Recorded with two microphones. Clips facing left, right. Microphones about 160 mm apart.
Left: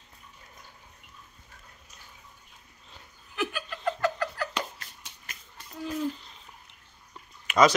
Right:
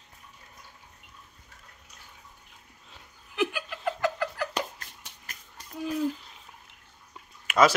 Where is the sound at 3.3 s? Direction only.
15° right (ahead or behind).